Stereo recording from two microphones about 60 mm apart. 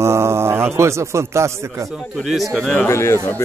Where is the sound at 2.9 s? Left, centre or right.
Left.